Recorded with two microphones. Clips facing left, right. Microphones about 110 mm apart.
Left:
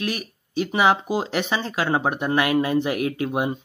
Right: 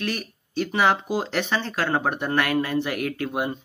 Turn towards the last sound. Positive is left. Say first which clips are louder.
# left 3 dB
turn(degrees=20)  # may be behind; listen again after turning